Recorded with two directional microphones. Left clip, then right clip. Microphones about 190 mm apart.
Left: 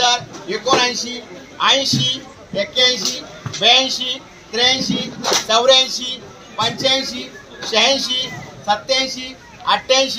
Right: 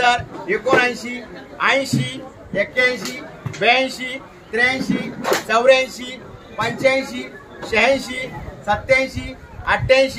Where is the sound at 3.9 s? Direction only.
30° right (ahead or behind).